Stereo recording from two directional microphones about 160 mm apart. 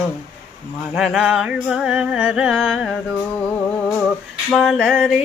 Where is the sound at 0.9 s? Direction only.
Centre (ahead or behind).